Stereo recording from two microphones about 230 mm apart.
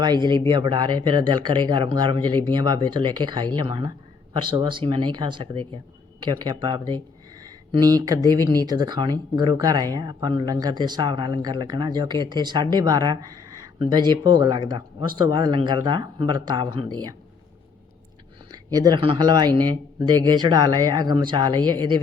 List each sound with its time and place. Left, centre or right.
0.0 s speech: centre
18.5 s speech: centre